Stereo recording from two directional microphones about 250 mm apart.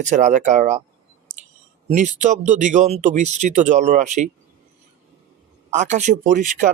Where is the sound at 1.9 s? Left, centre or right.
Right.